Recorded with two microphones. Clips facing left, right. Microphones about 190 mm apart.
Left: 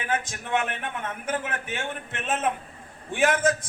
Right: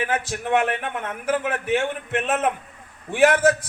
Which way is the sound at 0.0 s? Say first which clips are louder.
Right 4 dB; 65° right (ahead or behind).